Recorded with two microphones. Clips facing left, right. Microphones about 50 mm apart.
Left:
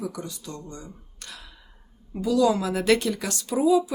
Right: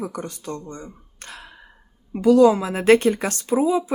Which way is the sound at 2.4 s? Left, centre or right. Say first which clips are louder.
Right 6 dB; right.